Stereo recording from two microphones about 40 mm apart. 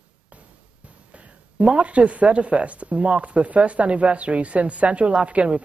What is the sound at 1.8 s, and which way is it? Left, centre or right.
Speech, right.